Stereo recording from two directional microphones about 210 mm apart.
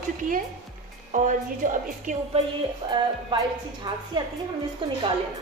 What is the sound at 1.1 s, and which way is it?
A woman's voice, 35° right (ahead or behind).